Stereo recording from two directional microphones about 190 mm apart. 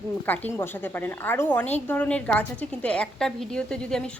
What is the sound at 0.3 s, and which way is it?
A woman's voice, 10° left (ahead or behind).